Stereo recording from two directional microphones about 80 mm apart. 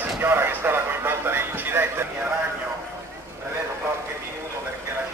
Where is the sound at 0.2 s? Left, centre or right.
Right.